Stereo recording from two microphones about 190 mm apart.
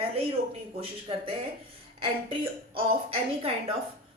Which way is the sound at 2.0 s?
30° right (ahead or behind).